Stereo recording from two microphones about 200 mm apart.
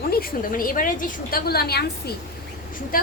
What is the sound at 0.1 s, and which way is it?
A woman's voice, 50° left (ahead or behind).